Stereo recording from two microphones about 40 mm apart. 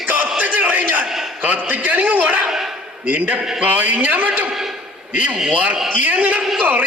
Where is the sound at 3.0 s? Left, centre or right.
Right.